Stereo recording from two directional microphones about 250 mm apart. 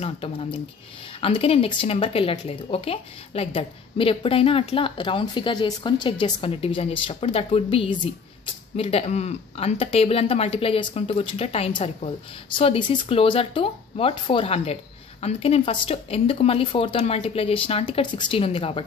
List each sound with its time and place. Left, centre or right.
0.0 s speech: left